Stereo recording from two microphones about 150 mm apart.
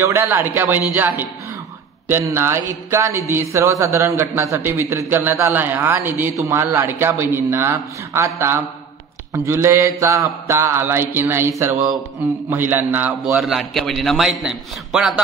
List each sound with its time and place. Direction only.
0.0 s a man's voice: 15° right (ahead or behind)
13.4 s a man's voice: centre (ahead or behind)